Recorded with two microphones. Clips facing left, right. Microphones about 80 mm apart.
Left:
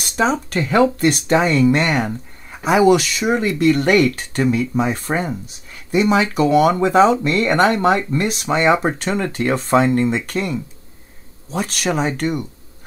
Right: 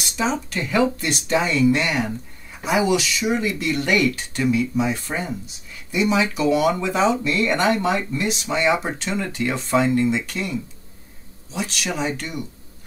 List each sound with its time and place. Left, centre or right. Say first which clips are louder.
0.0 s speech: left 5 dB; left